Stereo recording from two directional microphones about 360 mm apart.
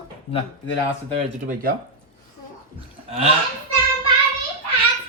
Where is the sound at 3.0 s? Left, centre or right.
Centre.